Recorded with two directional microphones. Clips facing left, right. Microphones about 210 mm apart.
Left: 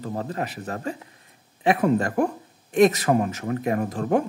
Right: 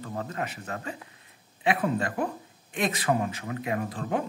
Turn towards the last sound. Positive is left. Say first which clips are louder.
# left 7 dB
turn(degrees=45)  # may be behind; listen again after turning